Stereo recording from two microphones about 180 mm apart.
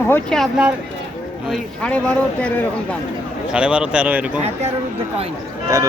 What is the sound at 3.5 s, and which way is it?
Speech, 5° right (ahead or behind).